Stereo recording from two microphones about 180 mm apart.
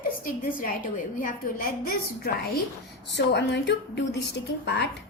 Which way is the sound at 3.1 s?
75° left (ahead or behind).